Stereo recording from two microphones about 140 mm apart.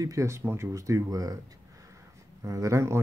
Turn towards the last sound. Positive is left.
turn(degrees=-20)  # may be behind; listen again after turning